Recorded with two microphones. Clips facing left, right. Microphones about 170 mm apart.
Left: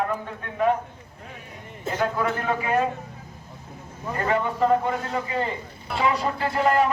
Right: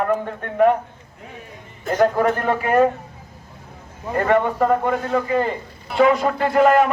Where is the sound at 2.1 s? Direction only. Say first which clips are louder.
Right 6 dB; 55° right (ahead or behind).